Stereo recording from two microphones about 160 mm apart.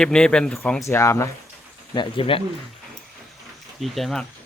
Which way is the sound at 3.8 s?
Centre (ahead or behind).